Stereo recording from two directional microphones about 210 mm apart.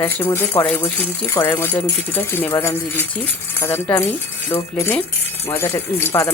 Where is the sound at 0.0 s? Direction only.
10° left (ahead or behind).